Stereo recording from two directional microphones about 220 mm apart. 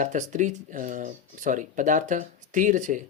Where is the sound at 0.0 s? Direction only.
35° right (ahead or behind).